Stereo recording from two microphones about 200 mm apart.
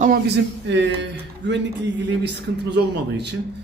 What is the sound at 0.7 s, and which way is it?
Speech, 60° right (ahead or behind).